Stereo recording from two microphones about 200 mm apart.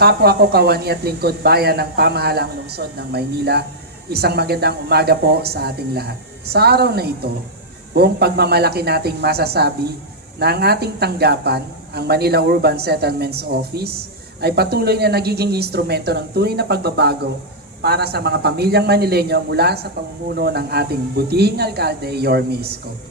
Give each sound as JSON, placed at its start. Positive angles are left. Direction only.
{"t": 0.0, "sound": "speech", "side_deg": -50}